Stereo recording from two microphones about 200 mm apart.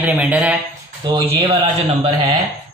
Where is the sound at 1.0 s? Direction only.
20° right (ahead or behind).